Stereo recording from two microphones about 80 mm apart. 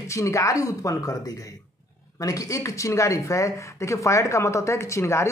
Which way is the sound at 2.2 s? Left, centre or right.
Left.